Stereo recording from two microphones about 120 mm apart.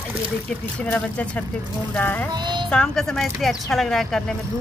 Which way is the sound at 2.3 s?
40° right (ahead or behind).